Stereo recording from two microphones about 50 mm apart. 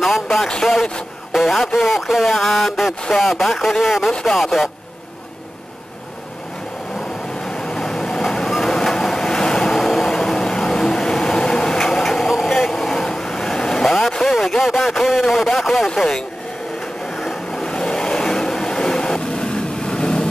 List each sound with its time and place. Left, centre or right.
0.0 s speech: centre
0.5 s speech: centre
1.3 s a sound: centre
3.2 s speech: centre
3.5 s a sound: centre
4.1 s speech: centre
4.4 s a sound: centre
7.4 s vehicle: centre
8.3 s train: centre
14.3 s speech: centre
15.6 s a sound: centre
15.9 s speech: centre
17.2 s vehicle: centre